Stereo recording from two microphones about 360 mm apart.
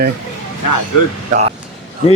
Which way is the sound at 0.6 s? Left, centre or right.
Left.